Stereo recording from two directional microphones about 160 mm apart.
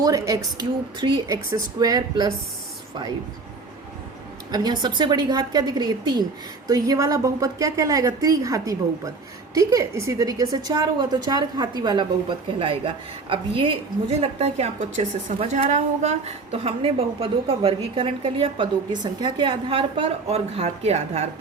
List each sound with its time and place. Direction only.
0.0 s a woman's voice: 20° right (ahead or behind)
4.5 s a woman's voice: 25° right (ahead or behind); by 21.2 s 45° right (ahead or behind)